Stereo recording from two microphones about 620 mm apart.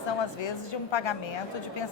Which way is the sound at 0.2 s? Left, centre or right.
Left.